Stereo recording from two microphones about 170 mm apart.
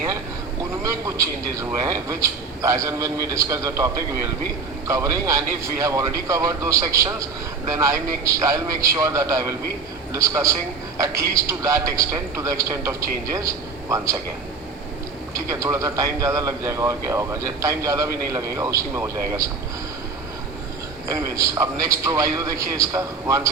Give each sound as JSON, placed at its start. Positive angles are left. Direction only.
{"t": 0.9, "sound": "a man's voice", "side_deg": -20}
{"t": 15.3, "sound": "a man's voice", "side_deg": -20}
{"t": 21.1, "sound": "a man's voice", "side_deg": -20}